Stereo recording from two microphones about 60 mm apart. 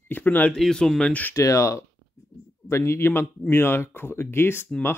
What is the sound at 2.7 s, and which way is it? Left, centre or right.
Speech, left.